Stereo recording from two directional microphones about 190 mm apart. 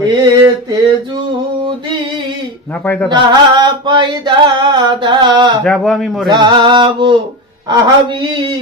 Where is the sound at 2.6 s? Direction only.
10° left (ahead or behind).